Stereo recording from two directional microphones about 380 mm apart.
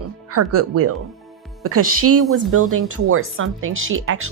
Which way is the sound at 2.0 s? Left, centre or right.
Right.